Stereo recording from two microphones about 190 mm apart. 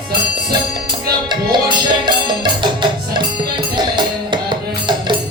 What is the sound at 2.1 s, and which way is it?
Music, 25° right (ahead or behind).